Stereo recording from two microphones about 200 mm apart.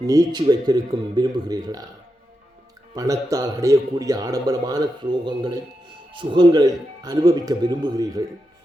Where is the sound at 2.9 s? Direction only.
15° right (ahead or behind).